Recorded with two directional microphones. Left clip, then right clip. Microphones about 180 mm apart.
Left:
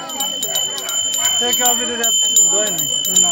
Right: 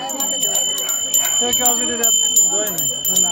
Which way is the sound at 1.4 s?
55° left (ahead or behind).